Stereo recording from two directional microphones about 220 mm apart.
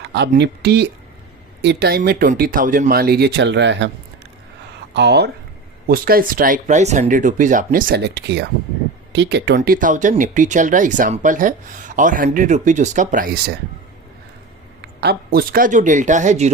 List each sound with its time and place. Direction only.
0.1 s speech: 50° right (ahead or behind)
4.9 s speech: 50° right (ahead or behind)
9.6 s speech: 35° right (ahead or behind)
15.0 s speech: 45° right (ahead or behind)